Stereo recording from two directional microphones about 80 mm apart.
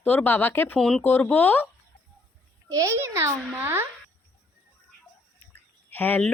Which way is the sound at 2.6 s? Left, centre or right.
Right.